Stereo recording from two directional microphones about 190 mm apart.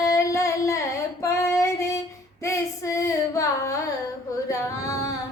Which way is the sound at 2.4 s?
15° left (ahead or behind).